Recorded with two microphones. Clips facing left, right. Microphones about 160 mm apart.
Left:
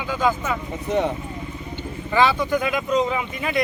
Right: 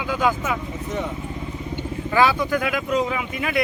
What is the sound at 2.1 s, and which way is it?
Speech, 10° right (ahead or behind).